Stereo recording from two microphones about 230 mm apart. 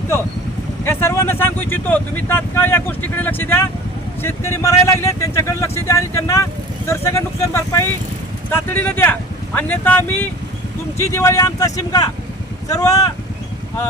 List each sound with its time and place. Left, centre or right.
0.9 s speech: centre